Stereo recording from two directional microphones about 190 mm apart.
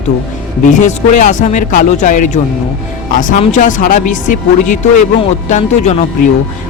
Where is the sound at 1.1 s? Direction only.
40° left (ahead or behind).